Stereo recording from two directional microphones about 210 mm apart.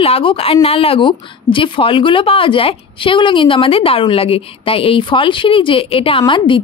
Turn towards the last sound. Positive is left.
turn(degrees=25)  # may be behind; listen again after turning